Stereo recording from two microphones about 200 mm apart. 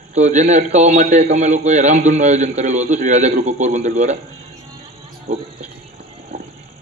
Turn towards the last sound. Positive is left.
turn(degrees=-35)  # may be behind; listen again after turning